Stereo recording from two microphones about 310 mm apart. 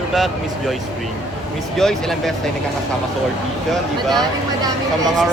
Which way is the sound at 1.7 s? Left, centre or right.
Centre.